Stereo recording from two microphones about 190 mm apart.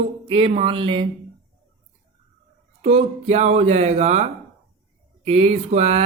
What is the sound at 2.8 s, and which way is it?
Speech, 30° right (ahead or behind).